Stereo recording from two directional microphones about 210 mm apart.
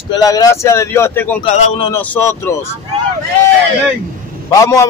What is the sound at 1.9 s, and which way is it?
Speech, 10° left (ahead or behind).